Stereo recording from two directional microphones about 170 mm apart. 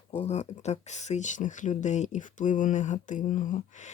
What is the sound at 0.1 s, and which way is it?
Speech, 35° left (ahead or behind).